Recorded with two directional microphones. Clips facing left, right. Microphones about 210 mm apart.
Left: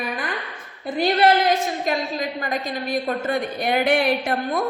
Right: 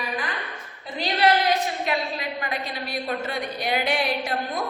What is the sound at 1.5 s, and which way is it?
A woman's voice, 45° left (ahead or behind).